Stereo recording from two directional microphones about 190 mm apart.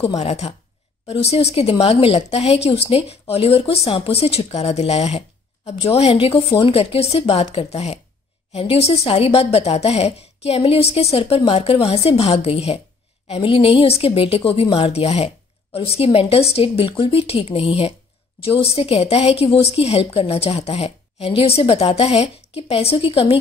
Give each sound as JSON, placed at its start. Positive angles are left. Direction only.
{"t": 0.2, "sound": "a woman's voice", "side_deg": 35}